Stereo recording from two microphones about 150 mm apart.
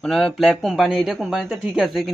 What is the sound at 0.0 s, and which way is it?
Speech, 5° left (ahead or behind).